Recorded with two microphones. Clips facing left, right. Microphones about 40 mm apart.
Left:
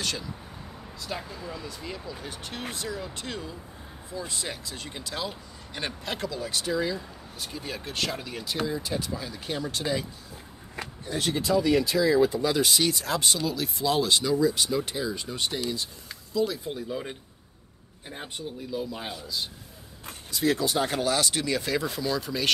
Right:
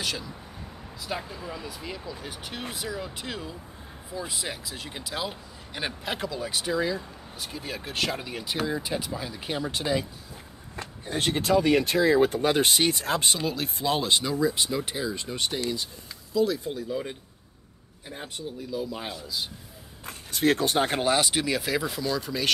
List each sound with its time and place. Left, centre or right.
1.0 s speech: centre
11.1 s speech: right; by 14.8 s centre
14.8 s speech: centre
16.3 s speech: centre
18.9 s speech: centre
20.1 s speech: right; by 21.5 s centre
21.5 s speech: centre